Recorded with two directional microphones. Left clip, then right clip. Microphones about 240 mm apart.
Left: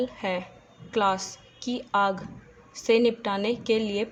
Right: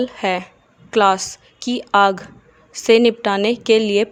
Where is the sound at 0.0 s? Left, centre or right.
Right.